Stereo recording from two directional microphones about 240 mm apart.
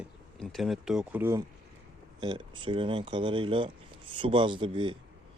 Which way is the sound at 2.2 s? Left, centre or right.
Centre.